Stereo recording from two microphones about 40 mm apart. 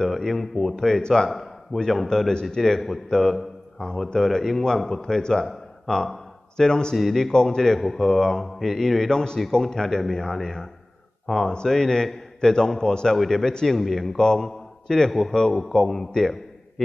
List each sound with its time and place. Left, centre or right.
0.0 s a man's voice: centre
7.0 s a man's voice: centre
9.1 s a man's voice: centre
14.1 s a man's voice: centre